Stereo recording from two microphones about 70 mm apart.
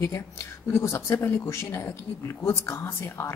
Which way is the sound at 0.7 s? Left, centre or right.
Left.